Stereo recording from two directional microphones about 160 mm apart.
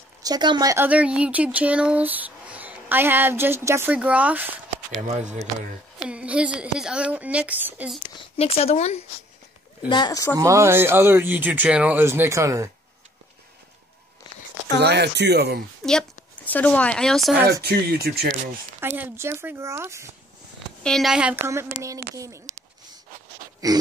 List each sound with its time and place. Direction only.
0.2 s speech: 25° right (ahead or behind)
0.8 s speech: 10° right (ahead or behind)
5.0 s speech: 45° right (ahead or behind)
6.0 s speech: 5° right (ahead or behind)
8.4 s speech: 40° left (ahead or behind)
9.8 s speech: 25° left (ahead or behind)
10.3 s speech: 20° right (ahead or behind)
14.8 s speech: 90° right
15.8 s speech: 5° left (ahead or behind)
17.5 s speech: 80° right
18.8 s speech: 15° right (ahead or behind)
20.8 s speech: centre (ahead or behind); by 22.4 s 20° right (ahead or behind)
23.6 s speech: 20° right (ahead or behind)